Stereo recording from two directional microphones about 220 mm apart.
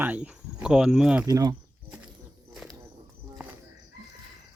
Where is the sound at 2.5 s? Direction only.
Centre (ahead or behind).